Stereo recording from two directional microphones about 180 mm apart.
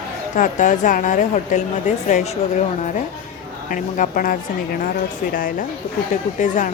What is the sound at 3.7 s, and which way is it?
Speech, 50° left (ahead or behind).